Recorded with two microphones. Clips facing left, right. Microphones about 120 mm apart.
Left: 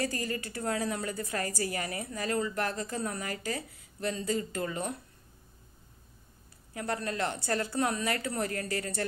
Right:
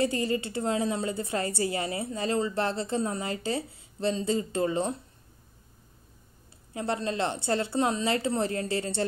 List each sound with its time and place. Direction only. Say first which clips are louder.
0.0 s a woman's voice: right 6 dB; 25° right (ahead or behind)
6.7 s a woman's voice: right 4 dB; 25° right (ahead or behind)